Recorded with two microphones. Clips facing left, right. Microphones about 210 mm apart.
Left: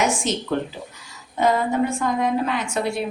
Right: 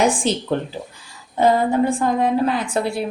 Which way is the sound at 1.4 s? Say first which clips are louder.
Right 3 dB; 35° right (ahead or behind).